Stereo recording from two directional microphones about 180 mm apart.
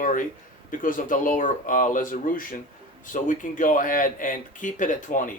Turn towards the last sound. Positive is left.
turn(degrees=45)  # may be behind; listen again after turning